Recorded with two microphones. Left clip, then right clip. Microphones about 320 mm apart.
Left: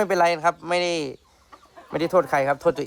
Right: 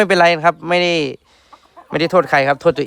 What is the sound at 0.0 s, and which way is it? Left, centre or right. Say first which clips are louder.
A man's voice: right 8 dB; right.